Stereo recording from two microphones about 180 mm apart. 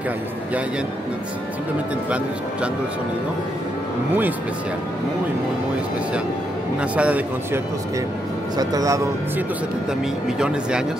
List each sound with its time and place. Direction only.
2.0 s speech: 5° right (ahead or behind)
6.8 s speech: 5° right (ahead or behind)
8.5 s speech: 20° right (ahead or behind)
10.2 s speech: 5° right (ahead or behind)